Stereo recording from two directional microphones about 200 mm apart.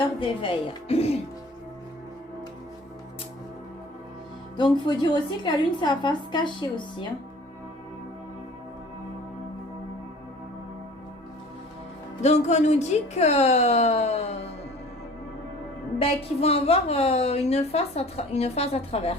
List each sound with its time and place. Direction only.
0.2 s a woman's voice: 25° left (ahead or behind)
4.5 s a woman's voice: 20° left (ahead or behind)
12.2 s a woman's voice: 35° left (ahead or behind)
16.0 s a woman's voice: 30° left (ahead or behind)